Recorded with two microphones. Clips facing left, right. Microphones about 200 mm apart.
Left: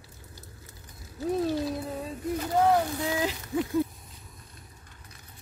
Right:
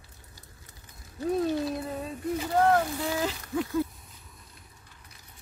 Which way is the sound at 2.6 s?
15° left (ahead or behind).